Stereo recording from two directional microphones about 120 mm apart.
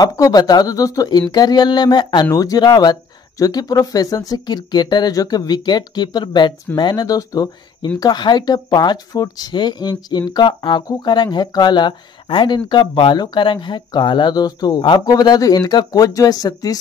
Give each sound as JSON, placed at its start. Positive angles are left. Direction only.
{"t": 0.0, "sound": "speech", "side_deg": 35}